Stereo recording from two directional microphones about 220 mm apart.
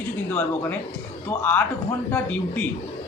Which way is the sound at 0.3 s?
10° left (ahead or behind).